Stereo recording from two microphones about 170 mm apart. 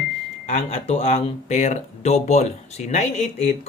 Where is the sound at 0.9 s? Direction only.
35° left (ahead or behind).